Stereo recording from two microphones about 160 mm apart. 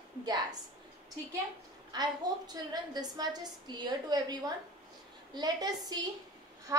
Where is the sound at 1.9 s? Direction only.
25° right (ahead or behind).